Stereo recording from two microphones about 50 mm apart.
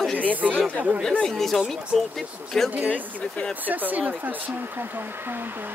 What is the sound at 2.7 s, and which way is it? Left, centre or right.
Speech, right.